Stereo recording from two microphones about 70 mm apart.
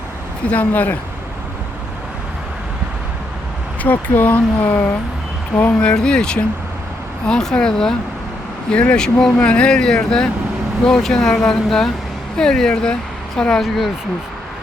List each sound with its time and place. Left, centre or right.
0.5 s speech: left
3.8 s speech: left; by 13.7 s centre